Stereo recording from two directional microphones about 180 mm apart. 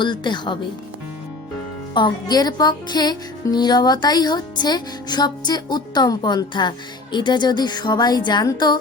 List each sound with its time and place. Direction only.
0.0 s music: 25° left (ahead or behind)
1.9 s music: 25° left (ahead or behind)